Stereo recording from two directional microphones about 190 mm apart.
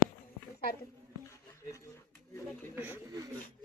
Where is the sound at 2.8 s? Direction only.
10° right (ahead or behind).